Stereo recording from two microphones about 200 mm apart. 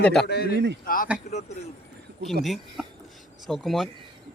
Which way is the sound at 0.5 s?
60° right (ahead or behind).